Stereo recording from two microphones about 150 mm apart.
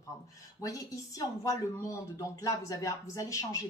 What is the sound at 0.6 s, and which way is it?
Speech, 20° left (ahead or behind).